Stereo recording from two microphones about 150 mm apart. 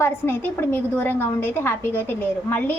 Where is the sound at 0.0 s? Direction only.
15° left (ahead or behind).